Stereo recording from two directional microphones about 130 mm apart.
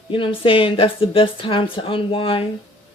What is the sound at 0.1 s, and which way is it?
Speech, 40° left (ahead or behind).